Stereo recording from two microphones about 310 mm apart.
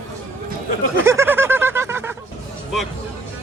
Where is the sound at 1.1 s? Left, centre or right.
Centre.